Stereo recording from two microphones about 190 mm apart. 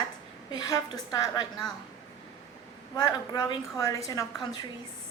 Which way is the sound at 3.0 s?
20° left (ahead or behind).